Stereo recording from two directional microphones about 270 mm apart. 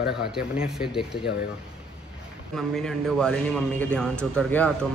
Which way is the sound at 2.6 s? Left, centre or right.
Centre.